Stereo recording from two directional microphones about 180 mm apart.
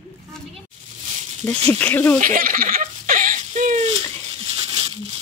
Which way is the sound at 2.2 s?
50° right (ahead or behind).